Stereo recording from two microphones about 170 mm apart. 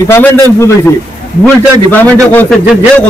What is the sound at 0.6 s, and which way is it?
A man's voice, 15° left (ahead or behind).